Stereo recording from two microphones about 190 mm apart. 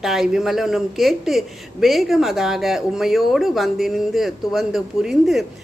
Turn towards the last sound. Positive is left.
turn(degrees=0)  # may be behind; listen again after turning